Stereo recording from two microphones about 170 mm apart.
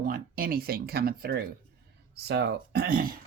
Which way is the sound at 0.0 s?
60° right (ahead or behind).